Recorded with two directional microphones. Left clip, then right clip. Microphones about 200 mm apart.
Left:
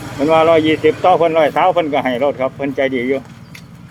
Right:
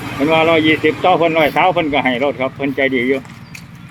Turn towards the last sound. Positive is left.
turn(degrees=0)  # may be behind; listen again after turning